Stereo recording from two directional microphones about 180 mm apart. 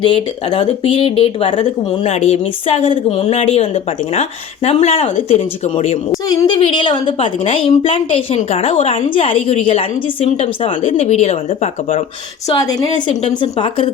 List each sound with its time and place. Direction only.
0.0 s a woman's voice: 30° left (ahead or behind)
6.2 s a woman's voice: 25° left (ahead or behind); by 12.0 s 45° left (ahead or behind)
12.5 s speech: 20° left (ahead or behind)